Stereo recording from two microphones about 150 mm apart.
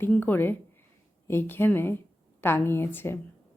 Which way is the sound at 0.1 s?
10° left (ahead or behind).